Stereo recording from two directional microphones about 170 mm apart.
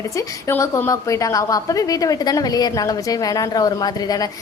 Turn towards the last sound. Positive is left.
turn(degrees=20)  # may be behind; listen again after turning